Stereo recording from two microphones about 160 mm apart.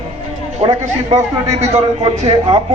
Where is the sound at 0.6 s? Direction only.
40° right (ahead or behind).